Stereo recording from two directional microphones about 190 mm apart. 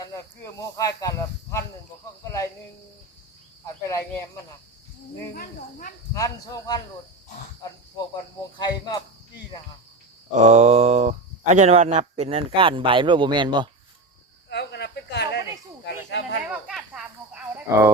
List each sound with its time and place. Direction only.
0.0 s speech: 15° left (ahead or behind)
3.8 s speech: 15° left (ahead or behind)
5.3 s cricket: 50° left (ahead or behind)
6.1 s speech: 15° left (ahead or behind)
8.5 s speech: 20° left (ahead or behind)
10.3 s speech: 35° right (ahead or behind)
14.5 s a sound: 65° left (ahead or behind)
16.0 s snake: 65° left (ahead or behind)
16.6 s snake: 5° right (ahead or behind)
17.7 s speech: 15° right (ahead or behind)